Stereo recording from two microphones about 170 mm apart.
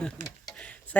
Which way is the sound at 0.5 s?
5° left (ahead or behind).